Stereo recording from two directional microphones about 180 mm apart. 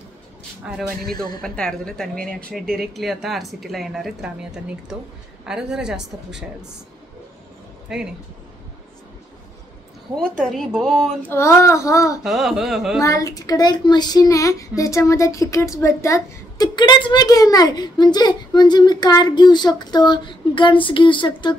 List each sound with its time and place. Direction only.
0.7 s a woman's voice: centre (ahead or behind)
7.9 s a woman's voice: 5° right (ahead or behind)
10.1 s a woman's voice: 5° left (ahead or behind)
11.3 s a child's voice: 15° left (ahead or behind)
12.2 s a woman's voice: centre (ahead or behind)
13.0 s speech: 20° left (ahead or behind)